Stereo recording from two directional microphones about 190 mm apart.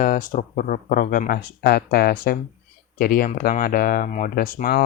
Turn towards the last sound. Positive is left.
turn(degrees=50)  # may be behind; listen again after turning